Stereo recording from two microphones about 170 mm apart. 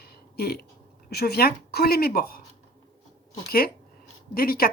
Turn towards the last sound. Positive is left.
turn(degrees=60)  # may be behind; listen again after turning